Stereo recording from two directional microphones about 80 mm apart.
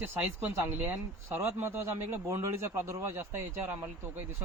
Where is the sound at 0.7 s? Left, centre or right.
Right.